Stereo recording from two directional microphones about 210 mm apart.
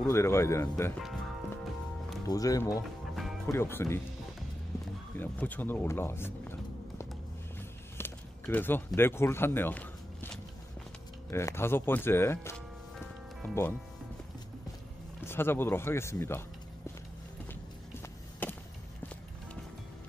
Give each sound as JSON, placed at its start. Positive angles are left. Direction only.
{"t": 0.0, "sound": "speech", "side_deg": 10}
{"t": 2.2, "sound": "speech", "side_deg": 15}
{"t": 3.2, "sound": "music", "side_deg": 0}
{"t": 3.5, "sound": "speech", "side_deg": 10}
{"t": 5.1, "sound": "speech", "side_deg": 10}
{"t": 8.0, "sound": "a sound", "side_deg": 10}
{"t": 11.2, "sound": "speech", "side_deg": 10}
{"t": 15.2, "sound": "speech", "side_deg": 10}
{"t": 18.4, "sound": "a sound", "side_deg": 10}